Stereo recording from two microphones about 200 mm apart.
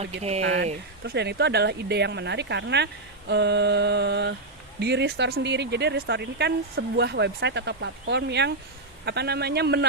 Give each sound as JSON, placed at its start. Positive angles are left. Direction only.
{"t": 0.0, "sound": "speech", "side_deg": -30}
{"t": 0.4, "sound": "speech", "side_deg": -65}